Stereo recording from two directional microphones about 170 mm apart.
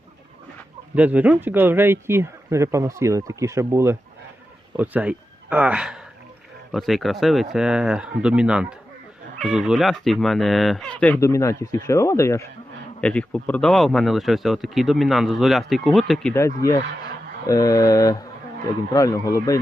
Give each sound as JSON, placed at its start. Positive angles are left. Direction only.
{"t": 0.9, "sound": "speech", "side_deg": -10}
{"t": 13.0, "sound": "speech", "side_deg": 5}
{"t": 16.3, "sound": "speech", "side_deg": 20}